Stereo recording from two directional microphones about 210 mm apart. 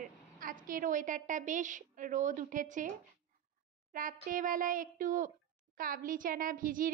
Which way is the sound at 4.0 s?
40° right (ahead or behind).